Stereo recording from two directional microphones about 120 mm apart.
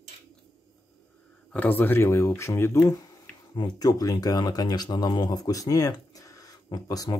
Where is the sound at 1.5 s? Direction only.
15° left (ahead or behind).